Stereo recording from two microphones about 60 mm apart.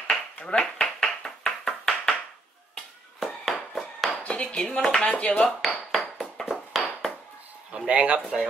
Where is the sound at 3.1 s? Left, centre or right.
Centre.